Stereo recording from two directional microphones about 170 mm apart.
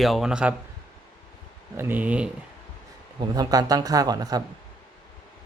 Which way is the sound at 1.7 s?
10° right (ahead or behind).